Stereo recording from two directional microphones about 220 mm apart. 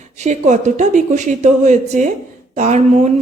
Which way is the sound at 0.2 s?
35° right (ahead or behind).